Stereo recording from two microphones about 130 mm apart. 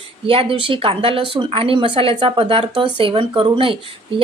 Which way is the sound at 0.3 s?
45° right (ahead or behind).